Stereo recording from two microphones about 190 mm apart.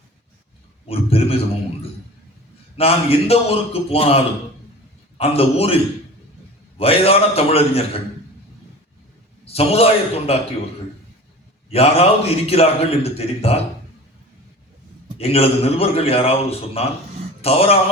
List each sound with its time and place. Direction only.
0.9 s a man's voice: 30° left (ahead or behind)
2.7 s a man's voice: 30° left (ahead or behind)
9.4 s a man's voice: 30° left (ahead or behind)
11.7 s a man's voice: 30° left (ahead or behind)
15.2 s a man's voice: 30° left (ahead or behind)